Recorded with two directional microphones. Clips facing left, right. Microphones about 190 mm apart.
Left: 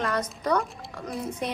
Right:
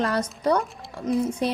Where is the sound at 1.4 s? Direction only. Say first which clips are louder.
Right 6 dB; 35° right (ahead or behind).